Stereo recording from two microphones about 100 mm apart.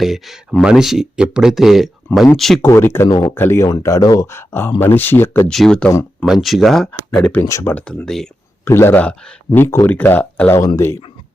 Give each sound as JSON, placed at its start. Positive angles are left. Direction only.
{"t": 0.0, "sound": "speech", "side_deg": 0}
{"t": 2.6, "sound": "speech", "side_deg": 25}
{"t": 3.1, "sound": "speech", "side_deg": 45}
{"t": 3.3, "sound": "speech", "side_deg": 25}
{"t": 3.7, "sound": "speech", "side_deg": 35}
{"t": 4.3, "sound": "speech", "side_deg": 25}
{"t": 5.5, "sound": "speech", "side_deg": 5}
{"t": 7.6, "sound": "speech", "side_deg": 20}
{"t": 7.9, "sound": "speech", "side_deg": 5}
{"t": 8.6, "sound": "speech", "side_deg": 25}
{"t": 9.0, "sound": "speech", "side_deg": 15}
{"t": 9.5, "sound": "speech", "side_deg": 25}
{"t": 10.8, "sound": "speech", "side_deg": 30}